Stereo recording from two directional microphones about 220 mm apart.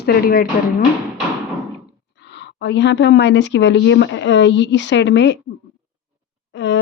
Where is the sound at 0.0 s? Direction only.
45° left (ahead or behind).